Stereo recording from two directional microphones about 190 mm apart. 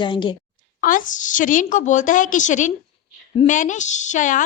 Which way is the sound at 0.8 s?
45° left (ahead or behind).